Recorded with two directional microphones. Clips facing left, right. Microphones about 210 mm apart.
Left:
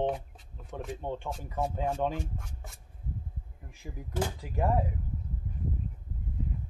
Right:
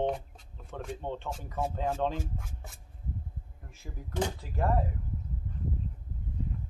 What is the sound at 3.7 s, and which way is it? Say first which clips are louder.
Speech: left 2 dB; 10° left (ahead or behind).